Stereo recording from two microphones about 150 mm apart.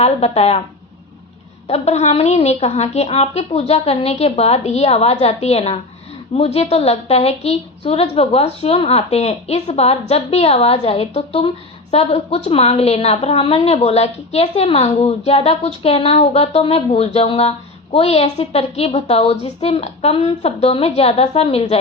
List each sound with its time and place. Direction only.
0.0 s a woman's voice: 45° left (ahead or behind)
1.6 s a woman's voice: 45° left (ahead or behind)